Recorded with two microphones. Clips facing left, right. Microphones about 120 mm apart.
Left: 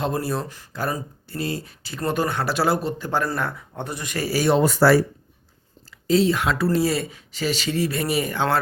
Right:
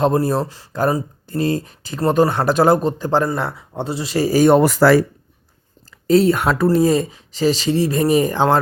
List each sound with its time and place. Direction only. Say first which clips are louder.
0.0 s speech: right 8 dB; 40° right (ahead or behind)
3.2 s speech: right 4 dB; 25° right (ahead or behind)
4.3 s speech: right 7 dB; 45° right (ahead or behind)
4.6 s speech: right 4 dB; 90° right
6.1 s speech: right 5 dB; 50° right (ahead or behind)